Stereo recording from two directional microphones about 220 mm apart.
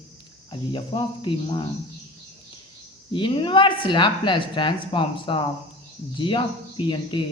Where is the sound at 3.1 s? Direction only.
20° left (ahead or behind).